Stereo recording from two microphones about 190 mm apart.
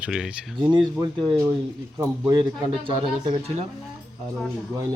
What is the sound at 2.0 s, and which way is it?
Speech, 15° right (ahead or behind).